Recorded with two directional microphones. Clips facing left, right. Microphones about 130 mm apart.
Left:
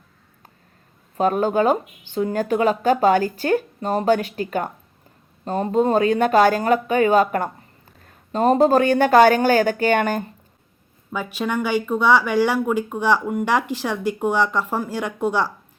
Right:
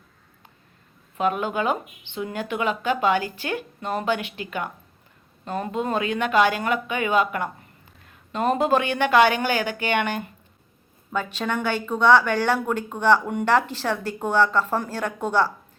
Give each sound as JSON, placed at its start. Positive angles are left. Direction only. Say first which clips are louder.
{"t": 1.1, "sound": "speech", "louder": "left 5 dB", "side_deg": 40}
{"t": 11.1, "sound": "speech", "louder": "left 2 dB", "side_deg": 10}